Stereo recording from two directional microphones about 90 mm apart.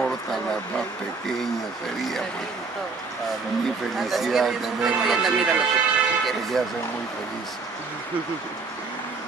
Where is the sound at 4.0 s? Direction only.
Centre (ahead or behind).